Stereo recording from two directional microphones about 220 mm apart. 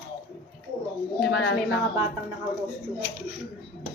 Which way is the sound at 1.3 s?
55° left (ahead or behind).